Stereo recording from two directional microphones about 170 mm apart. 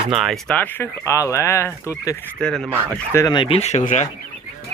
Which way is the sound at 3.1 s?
25° left (ahead or behind).